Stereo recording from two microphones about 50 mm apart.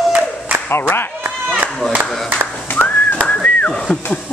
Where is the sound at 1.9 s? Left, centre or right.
Right.